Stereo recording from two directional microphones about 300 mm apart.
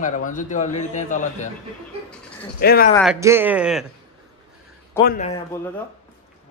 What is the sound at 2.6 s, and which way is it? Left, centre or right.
Speech, left.